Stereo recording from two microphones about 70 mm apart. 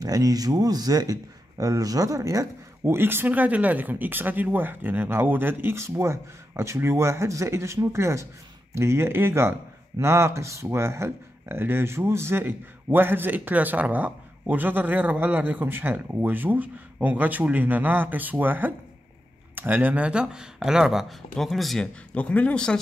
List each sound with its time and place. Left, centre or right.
0.0 s a man's voice: right
2.8 s speech: right; by 21.8 s centre
22.1 s speech: centre